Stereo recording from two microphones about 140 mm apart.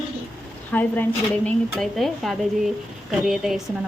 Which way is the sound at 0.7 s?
10° left (ahead or behind).